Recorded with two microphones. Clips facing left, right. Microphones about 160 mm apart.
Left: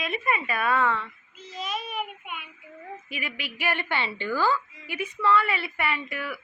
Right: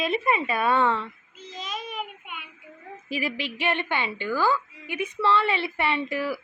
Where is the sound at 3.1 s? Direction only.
30° right (ahead or behind).